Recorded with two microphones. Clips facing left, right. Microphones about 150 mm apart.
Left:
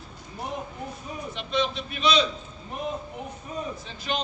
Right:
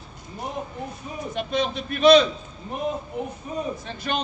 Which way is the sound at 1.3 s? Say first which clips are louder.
Right 2 dB; 50° right (ahead or behind).